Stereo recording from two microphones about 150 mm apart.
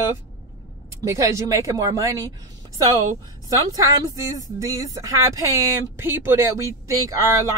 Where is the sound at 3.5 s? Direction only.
25° right (ahead or behind).